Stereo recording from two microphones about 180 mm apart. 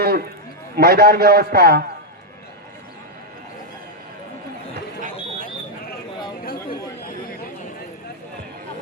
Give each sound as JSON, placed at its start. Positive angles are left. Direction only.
{"t": 0.0, "sound": "a sound", "side_deg": -60}
{"t": 0.8, "sound": "a man's voice", "side_deg": -60}
{"t": 6.4, "sound": "chatter", "side_deg": 55}